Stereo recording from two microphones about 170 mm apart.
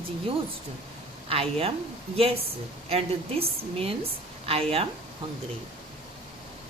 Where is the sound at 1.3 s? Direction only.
35° right (ahead or behind).